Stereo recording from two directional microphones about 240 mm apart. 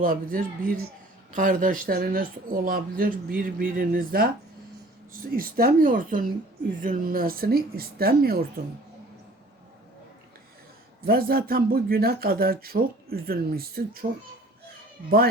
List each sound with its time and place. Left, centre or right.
0.0 s speech: right
5.4 s speech: right
11.0 s speech: right